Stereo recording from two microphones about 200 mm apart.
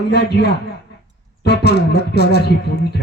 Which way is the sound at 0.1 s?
55° left (ahead or behind).